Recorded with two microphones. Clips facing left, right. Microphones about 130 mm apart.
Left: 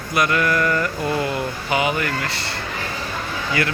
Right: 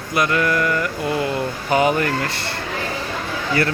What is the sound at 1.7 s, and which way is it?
Speech, 40° right (ahead or behind).